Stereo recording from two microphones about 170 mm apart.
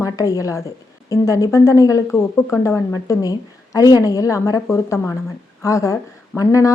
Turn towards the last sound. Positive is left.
turn(degrees=20)  # may be behind; listen again after turning